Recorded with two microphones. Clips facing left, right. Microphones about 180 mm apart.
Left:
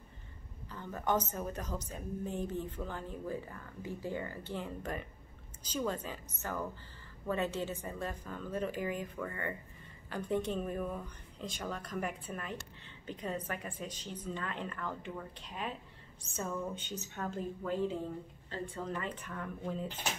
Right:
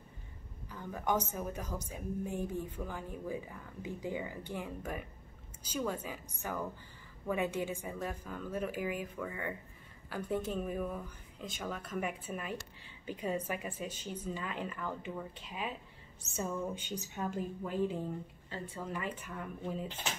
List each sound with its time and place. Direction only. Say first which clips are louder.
0.7 s a woman's voice: even; 10° right (ahead or behind)